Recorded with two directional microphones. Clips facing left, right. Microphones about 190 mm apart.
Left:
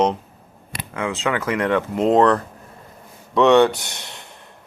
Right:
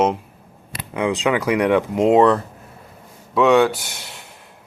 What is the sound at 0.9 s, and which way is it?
Speech, 15° right (ahead or behind).